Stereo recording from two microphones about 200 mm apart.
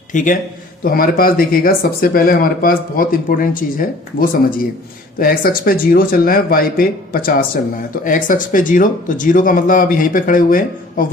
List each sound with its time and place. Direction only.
0.1 s a man's voice: 40° left (ahead or behind)